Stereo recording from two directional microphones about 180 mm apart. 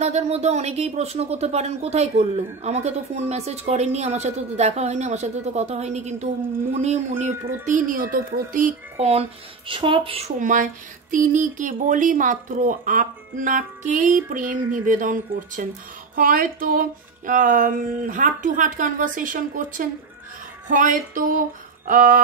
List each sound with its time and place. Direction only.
0.0 s speech: 35° right (ahead or behind)
7.6 s speech: 50° right (ahead or behind); by 10.3 s 30° right (ahead or behind)
10.4 s speech: 45° right (ahead or behind)